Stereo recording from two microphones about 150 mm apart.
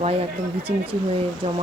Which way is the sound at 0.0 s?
45° right (ahead or behind).